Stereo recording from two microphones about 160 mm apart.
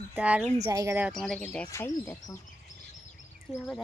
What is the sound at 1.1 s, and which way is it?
Speech, 5° left (ahead or behind).